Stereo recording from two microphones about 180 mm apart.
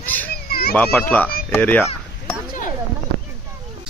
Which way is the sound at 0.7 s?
5° left (ahead or behind).